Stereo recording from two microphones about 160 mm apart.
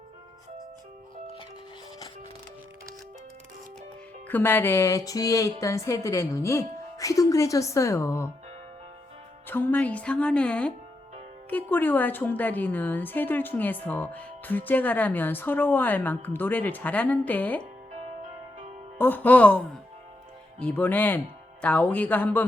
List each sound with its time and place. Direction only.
4.3 s a woman's voice: 10° left (ahead or behind)
9.5 s a woman's voice: 10° left (ahead or behind)
18.9 s a woman's voice: 10° left (ahead or behind)